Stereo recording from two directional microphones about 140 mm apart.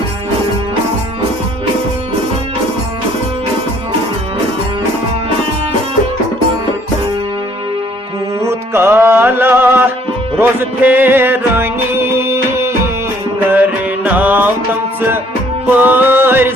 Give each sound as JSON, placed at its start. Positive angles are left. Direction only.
{"t": 8.4, "sound": "music", "side_deg": -20}
{"t": 15.6, "sound": "music", "side_deg": -15}